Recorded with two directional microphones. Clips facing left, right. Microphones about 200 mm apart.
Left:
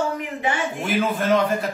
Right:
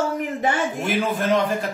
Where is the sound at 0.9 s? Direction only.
Centre (ahead or behind).